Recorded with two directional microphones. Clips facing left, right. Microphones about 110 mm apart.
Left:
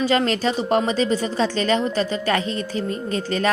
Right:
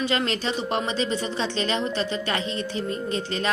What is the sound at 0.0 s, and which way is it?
A woman's voice, 40° left (ahead or behind).